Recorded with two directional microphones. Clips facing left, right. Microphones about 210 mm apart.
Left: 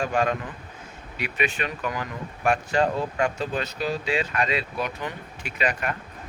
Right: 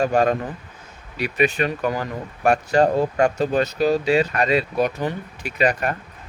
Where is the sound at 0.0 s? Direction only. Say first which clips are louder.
Right 6 dB; 40° right (ahead or behind).